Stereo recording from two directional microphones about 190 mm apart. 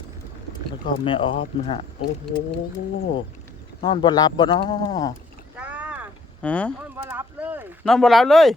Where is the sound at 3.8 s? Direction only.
25° left (ahead or behind).